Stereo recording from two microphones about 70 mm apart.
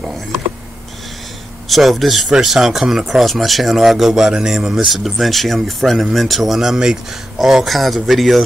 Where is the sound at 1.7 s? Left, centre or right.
Centre.